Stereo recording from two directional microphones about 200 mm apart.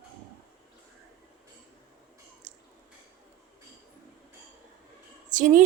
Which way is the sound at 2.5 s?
35° right (ahead or behind).